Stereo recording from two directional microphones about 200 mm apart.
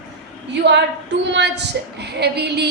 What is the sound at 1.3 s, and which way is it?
A woman's voice, 60° right (ahead or behind).